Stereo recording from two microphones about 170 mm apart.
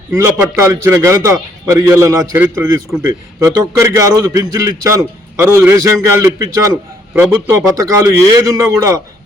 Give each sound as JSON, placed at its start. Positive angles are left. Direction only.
{"t": 0.1, "sound": "a man's voice", "side_deg": -15}